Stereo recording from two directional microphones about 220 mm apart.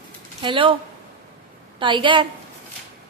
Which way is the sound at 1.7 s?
20° right (ahead or behind).